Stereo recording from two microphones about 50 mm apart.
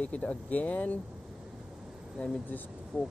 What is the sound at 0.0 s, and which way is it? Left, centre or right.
Speech, left.